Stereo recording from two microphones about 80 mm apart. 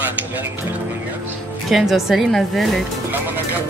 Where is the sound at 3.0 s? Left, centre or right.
Right.